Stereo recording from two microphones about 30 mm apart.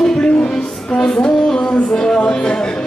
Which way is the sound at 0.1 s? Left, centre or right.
Left.